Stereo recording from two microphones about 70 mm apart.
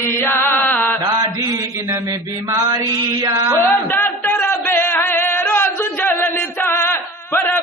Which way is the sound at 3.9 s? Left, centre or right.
Left.